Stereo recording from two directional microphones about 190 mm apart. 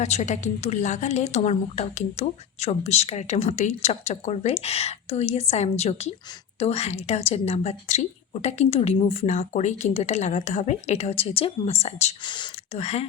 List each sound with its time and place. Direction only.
0.0 s a woman's voice: 40° left (ahead or behind)